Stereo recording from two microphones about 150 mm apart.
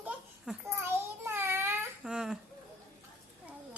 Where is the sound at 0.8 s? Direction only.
15° right (ahead or behind).